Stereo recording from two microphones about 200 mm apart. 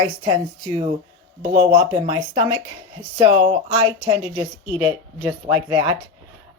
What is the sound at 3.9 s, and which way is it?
Speech, 10° right (ahead or behind).